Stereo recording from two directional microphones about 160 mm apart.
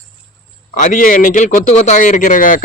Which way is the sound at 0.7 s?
55° left (ahead or behind).